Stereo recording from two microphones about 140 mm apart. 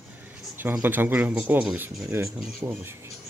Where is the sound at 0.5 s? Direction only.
15° right (ahead or behind).